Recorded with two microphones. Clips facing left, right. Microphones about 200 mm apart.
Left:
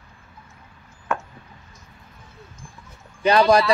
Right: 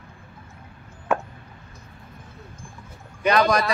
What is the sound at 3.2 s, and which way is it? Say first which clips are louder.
Speech: left 4 dB; 30° left (ahead or behind).